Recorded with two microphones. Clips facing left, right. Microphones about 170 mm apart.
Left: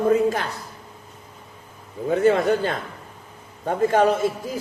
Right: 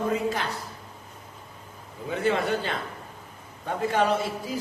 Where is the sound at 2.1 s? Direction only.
45° left (ahead or behind).